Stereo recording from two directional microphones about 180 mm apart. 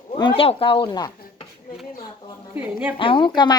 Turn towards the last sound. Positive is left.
turn(degrees=25)  # may be behind; listen again after turning